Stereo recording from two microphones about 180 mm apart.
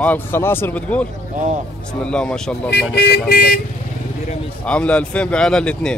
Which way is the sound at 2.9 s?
65° left (ahead or behind).